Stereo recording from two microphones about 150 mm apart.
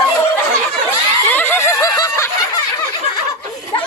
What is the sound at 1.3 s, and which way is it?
Snicker, 15° left (ahead or behind).